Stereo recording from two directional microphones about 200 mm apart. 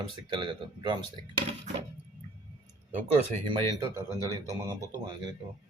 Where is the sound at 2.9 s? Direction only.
30° right (ahead or behind).